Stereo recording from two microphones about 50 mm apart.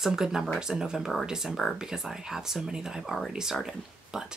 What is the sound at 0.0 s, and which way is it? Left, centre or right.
Speech, centre.